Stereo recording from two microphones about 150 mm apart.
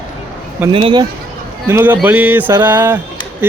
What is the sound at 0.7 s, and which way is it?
Speech, 30° right (ahead or behind).